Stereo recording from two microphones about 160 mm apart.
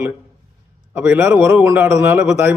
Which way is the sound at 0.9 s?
10° right (ahead or behind).